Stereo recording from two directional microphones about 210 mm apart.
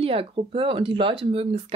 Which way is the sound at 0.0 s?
25° right (ahead or behind).